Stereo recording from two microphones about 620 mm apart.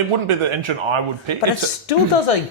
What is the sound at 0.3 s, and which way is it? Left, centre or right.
Speech, right.